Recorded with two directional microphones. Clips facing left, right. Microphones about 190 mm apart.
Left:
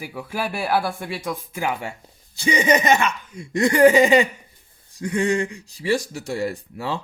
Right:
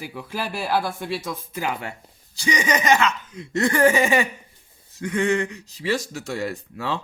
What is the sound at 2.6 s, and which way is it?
A man's voice, 25° left (ahead or behind).